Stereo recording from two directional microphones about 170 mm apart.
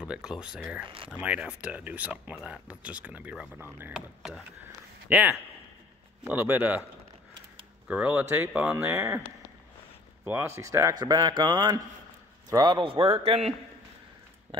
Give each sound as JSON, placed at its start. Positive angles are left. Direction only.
{"t": 0.0, "sound": "speech", "side_deg": -5}
{"t": 0.8, "sound": "a man's voice", "side_deg": -30}
{"t": 1.1, "sound": "speech", "side_deg": -10}
{"t": 3.9, "sound": "speech", "side_deg": 0}
{"t": 7.9, "sound": "a man's voice", "side_deg": -10}
{"t": 14.5, "sound": "speech", "side_deg": -30}